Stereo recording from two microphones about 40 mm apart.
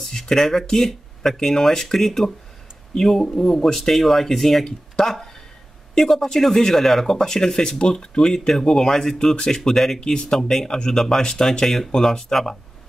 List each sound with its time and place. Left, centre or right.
0.0 s a woman's voice: centre